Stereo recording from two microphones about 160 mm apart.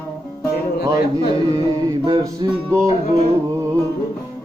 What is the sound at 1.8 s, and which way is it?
Music, 25° right (ahead or behind).